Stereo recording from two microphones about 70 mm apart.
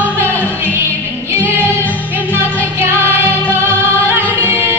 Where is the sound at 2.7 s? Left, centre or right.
Right.